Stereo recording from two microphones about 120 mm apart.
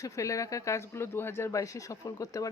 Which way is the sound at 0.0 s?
25° left (ahead or behind).